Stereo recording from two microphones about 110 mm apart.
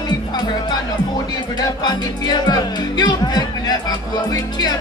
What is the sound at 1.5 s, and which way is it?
Music, 40° left (ahead or behind).